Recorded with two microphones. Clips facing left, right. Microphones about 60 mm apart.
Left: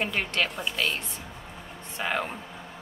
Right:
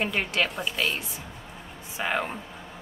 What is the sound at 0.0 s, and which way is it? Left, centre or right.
Speech, centre.